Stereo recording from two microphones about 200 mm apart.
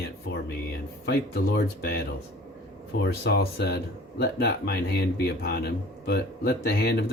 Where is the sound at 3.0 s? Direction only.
50° left (ahead or behind).